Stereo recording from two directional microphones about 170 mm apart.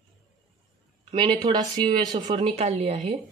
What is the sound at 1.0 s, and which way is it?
A woman's voice, 30° right (ahead or behind).